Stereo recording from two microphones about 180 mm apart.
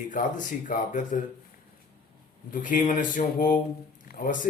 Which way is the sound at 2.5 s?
45° left (ahead or behind).